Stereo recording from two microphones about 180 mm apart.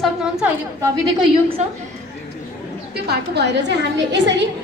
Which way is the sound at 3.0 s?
70° right (ahead or behind).